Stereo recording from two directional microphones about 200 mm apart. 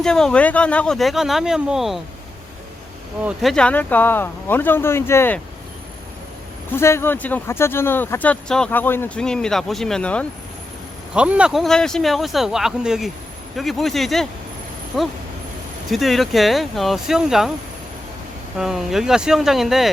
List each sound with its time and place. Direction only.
0.0 s speech: 5° left (ahead or behind)
3.2 s speech: centre (ahead or behind)
6.7 s speech: 10° left (ahead or behind)
11.1 s speech: 5° right (ahead or behind)
15.9 s speech: centre (ahead or behind)
18.5 s speech: centre (ahead or behind)